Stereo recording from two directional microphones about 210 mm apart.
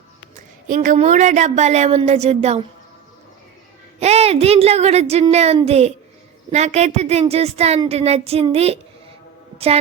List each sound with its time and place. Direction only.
0.3 s a woman's voice: 40° right (ahead or behind)
4.0 s a woman's voice: 30° right (ahead or behind)
9.6 s a sound: 30° right (ahead or behind)